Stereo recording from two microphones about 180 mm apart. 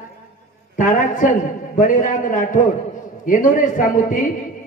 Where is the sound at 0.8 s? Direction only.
45° left (ahead or behind).